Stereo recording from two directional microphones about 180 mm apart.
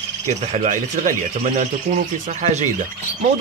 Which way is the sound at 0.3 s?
40° right (ahead or behind).